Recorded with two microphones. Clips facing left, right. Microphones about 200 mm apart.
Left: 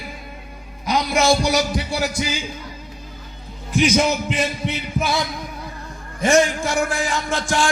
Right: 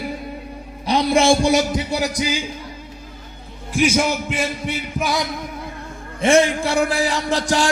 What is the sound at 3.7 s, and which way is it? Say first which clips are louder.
Speech: even; 10° right (ahead or behind).